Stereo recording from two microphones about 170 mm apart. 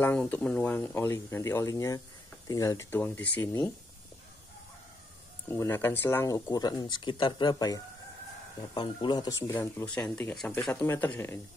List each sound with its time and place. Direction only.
0.0 s speech: 10° left (ahead or behind)
5.5 s speech: 15° left (ahead or behind)
9.4 s speech: 15° left (ahead or behind)